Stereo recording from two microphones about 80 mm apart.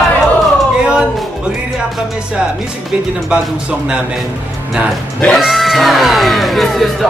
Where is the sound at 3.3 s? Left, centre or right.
Centre.